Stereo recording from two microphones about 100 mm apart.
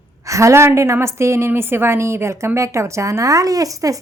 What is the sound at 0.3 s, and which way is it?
A woman's voice, 30° right (ahead or behind).